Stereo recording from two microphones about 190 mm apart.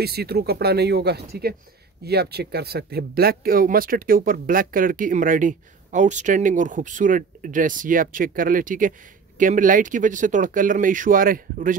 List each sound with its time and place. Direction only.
0.0 s speech: 55° right (ahead or behind)